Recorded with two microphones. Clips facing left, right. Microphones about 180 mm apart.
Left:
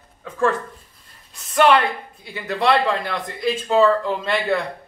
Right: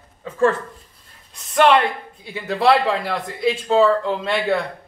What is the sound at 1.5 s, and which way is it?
Speech, centre (ahead or behind).